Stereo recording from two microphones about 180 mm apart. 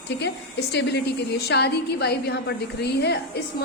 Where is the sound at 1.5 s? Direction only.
65° left (ahead or behind).